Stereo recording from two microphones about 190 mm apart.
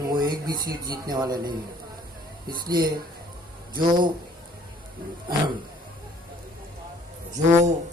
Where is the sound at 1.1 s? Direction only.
20° right (ahead or behind).